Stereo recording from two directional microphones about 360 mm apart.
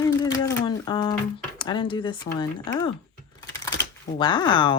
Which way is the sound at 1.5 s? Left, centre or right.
Centre.